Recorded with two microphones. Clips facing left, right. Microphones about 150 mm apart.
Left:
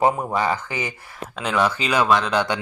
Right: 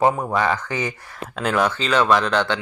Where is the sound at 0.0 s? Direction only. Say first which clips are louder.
Right 1 dB; 10° left (ahead or behind).